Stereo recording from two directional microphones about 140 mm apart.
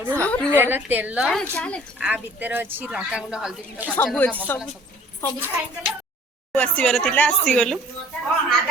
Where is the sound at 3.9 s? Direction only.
10° left (ahead or behind).